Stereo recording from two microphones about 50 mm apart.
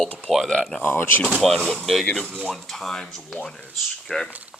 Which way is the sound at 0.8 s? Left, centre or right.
Left.